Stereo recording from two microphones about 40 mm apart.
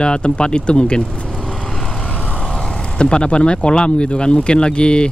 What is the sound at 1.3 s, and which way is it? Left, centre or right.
Vehicle, centre.